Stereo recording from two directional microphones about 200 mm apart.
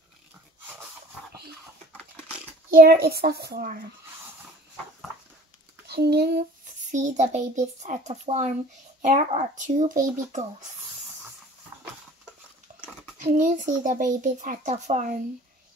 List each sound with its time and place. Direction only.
2.7 s a child's voice: 50° right (ahead or behind)
5.9 s a child's voice: 55° right (ahead or behind)
13.2 s a child's voice: 40° right (ahead or behind)